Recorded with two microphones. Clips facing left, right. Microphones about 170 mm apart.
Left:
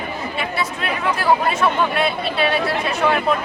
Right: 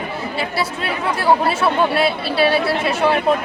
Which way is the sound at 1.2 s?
30° right (ahead or behind).